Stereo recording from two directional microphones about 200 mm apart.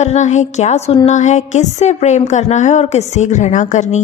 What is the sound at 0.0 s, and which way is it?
Music, 35° left (ahead or behind).